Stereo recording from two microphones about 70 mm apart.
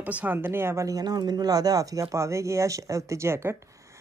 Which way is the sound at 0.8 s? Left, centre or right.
Right.